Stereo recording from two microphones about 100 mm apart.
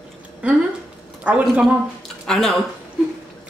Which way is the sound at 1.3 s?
10° right (ahead or behind).